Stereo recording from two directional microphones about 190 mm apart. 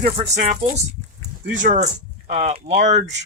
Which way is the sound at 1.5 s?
40° right (ahead or behind).